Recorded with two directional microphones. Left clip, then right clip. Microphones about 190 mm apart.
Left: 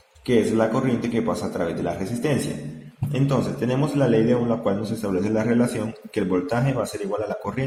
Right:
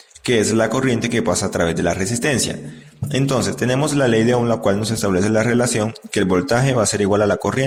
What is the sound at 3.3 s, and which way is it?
Speech, 40° right (ahead or behind).